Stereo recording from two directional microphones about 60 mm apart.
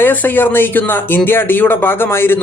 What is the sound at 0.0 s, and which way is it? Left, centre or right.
Speech, left.